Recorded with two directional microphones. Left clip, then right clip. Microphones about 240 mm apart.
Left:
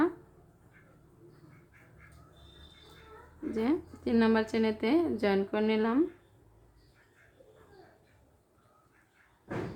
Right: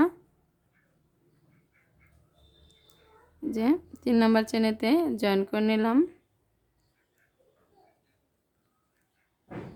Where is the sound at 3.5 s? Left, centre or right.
Right.